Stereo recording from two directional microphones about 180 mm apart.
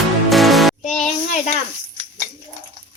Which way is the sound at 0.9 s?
40° left (ahead or behind).